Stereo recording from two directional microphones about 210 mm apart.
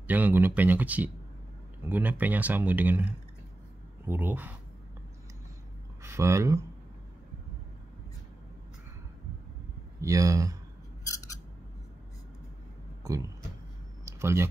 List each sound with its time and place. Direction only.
0.0 s speech: 10° right (ahead or behind)
6.0 s speech: 15° right (ahead or behind)
10.0 s speech: 15° right (ahead or behind)
13.0 s speech: 15° right (ahead or behind)
14.0 s a sound: 10° right (ahead or behind)